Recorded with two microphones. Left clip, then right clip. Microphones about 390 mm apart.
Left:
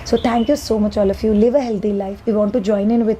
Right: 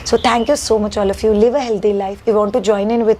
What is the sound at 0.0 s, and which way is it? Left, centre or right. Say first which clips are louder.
A woman's voice: right 3 dB; right.